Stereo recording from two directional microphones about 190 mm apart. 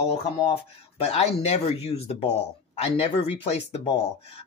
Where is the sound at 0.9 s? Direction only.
30° left (ahead or behind).